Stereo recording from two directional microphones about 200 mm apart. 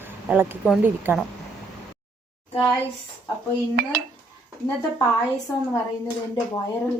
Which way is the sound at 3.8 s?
50° right (ahead or behind).